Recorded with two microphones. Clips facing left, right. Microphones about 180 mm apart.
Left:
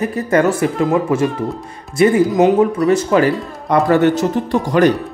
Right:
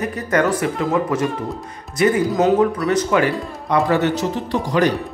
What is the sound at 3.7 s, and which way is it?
Speech, 50° left (ahead or behind).